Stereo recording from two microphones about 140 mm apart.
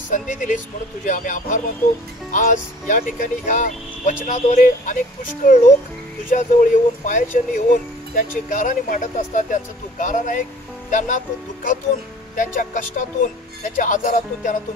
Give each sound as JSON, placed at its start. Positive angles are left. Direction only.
{"t": 0.1, "sound": "speech", "side_deg": 65}
{"t": 12.4, "sound": "speech", "side_deg": 65}